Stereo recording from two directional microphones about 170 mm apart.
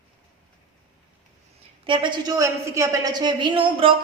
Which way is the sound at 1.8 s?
30° right (ahead or behind).